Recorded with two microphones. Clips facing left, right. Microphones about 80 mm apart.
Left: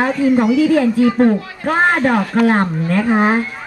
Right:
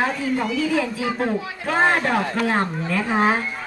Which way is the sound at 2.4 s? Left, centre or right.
Left.